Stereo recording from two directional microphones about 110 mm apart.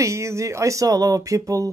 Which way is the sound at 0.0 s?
25° right (ahead or behind).